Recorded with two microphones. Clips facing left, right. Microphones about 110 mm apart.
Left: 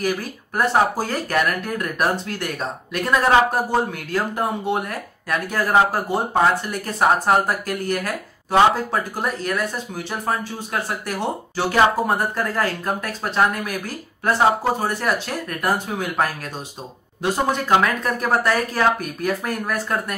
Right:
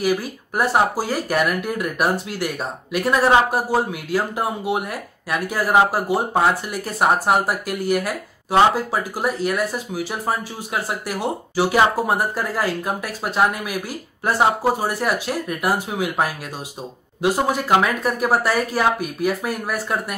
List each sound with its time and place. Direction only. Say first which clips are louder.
0.0 s speech: right 3 dB; 10° right (ahead or behind)